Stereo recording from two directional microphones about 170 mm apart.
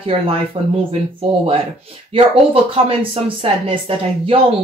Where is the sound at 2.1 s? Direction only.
35° right (ahead or behind).